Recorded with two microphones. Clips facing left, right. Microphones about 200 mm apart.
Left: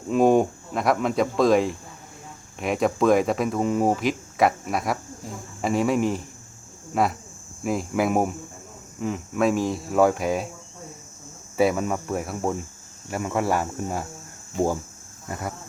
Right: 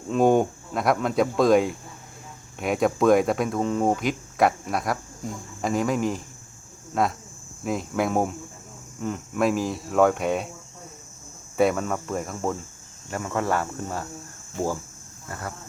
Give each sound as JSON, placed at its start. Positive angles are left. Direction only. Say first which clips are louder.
{"t": 0.1, "sound": "speech", "louder": "left 1 dB", "side_deg": 0}
{"t": 11.5, "sound": "speech", "louder": "even", "side_deg": 5}
{"t": 15.3, "sound": "speech", "louder": "left 3 dB", "side_deg": 15}